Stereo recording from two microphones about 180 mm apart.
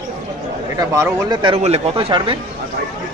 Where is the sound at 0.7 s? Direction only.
20° right (ahead or behind).